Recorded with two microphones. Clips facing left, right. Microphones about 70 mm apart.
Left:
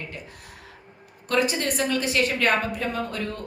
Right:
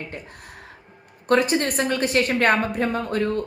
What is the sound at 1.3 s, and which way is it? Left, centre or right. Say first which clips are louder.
A woman's voice: right 4 dB; right.